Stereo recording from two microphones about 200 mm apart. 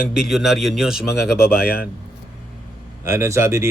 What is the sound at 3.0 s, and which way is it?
Speech, 15° right (ahead or behind).